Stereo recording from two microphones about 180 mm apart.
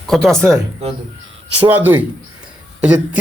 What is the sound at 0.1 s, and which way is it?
Speech, 5° left (ahead or behind).